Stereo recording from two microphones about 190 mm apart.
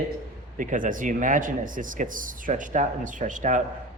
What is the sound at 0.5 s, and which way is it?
A man's voice, 45° right (ahead or behind).